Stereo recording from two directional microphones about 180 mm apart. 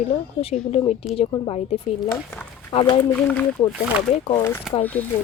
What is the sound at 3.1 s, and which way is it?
Speech, 5° left (ahead or behind).